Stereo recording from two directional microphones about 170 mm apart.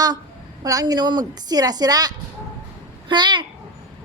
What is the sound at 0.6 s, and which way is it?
A woman's voice, 20° right (ahead or behind).